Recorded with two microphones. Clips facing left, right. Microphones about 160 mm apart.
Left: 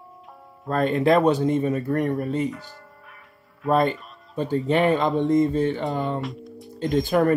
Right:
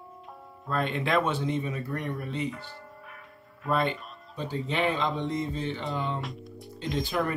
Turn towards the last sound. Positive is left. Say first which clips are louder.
# left 9 dB
turn(degrees=50)  # may be behind; listen again after turning